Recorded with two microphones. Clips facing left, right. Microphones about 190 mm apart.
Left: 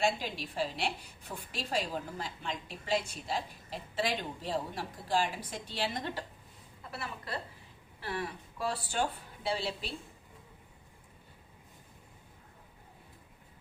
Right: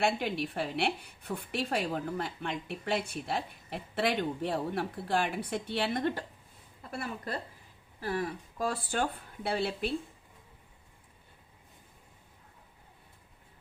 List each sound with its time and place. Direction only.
0.0 s a woman's voice: 60° right (ahead or behind)